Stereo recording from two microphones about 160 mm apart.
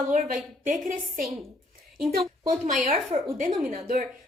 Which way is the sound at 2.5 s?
60° right (ahead or behind).